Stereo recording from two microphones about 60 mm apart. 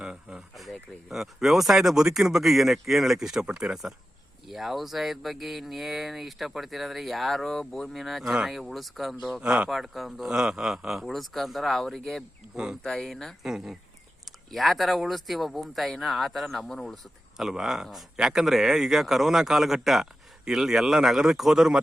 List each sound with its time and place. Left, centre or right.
0.0 s a sound: centre
0.5 s speech: centre
9.4 s speech: centre
9.6 s speech: centre
13.4 s speech: centre
17.3 s speech: centre